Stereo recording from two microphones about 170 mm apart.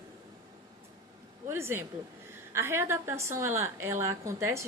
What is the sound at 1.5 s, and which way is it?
A woman's voice, 15° right (ahead or behind).